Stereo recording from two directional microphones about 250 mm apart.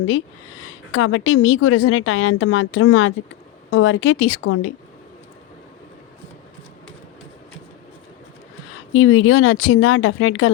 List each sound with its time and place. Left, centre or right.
0.9 s speech: left
8.9 s speech: left